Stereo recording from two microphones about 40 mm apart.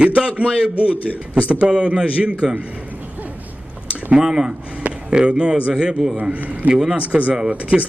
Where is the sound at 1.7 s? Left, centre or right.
Right.